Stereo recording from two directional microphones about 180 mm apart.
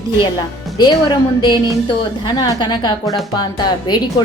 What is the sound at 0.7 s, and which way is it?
Speech, 25° left (ahead or behind).